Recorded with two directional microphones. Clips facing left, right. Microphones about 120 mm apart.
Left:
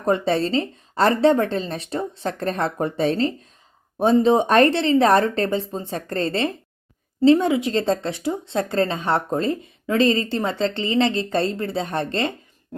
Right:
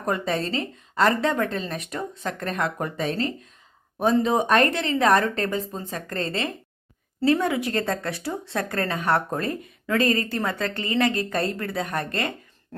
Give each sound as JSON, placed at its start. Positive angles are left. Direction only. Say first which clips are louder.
{"t": 0.0, "sound": "a woman's voice", "louder": "left 5 dB", "side_deg": 30}
{"t": 7.2, "sound": "speech", "louder": "left 6 dB", "side_deg": 20}